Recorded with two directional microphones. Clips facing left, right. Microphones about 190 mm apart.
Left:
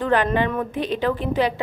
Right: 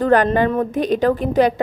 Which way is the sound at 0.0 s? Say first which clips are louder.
Right 5 dB; 45° right (ahead or behind).